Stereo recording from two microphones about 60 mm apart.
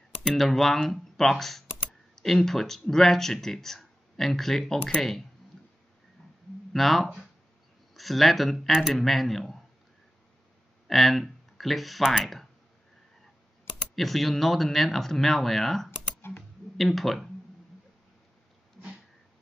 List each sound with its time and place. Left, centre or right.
0.2 s speech: centre
5.5 s a sound: centre
6.7 s speech: centre
10.9 s speech: centre
13.9 s speech: centre
16.2 s typing: left
16.7 s speech: centre